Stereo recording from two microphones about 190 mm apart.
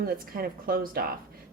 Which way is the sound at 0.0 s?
50° right (ahead or behind).